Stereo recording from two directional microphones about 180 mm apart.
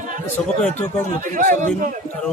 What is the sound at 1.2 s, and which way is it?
Speech, 45° right (ahead or behind).